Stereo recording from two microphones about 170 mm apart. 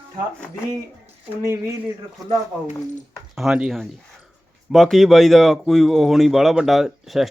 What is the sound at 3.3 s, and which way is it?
Speech, 5° right (ahead or behind).